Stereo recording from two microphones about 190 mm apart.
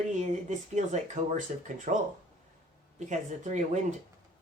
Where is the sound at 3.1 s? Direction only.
40° right (ahead or behind).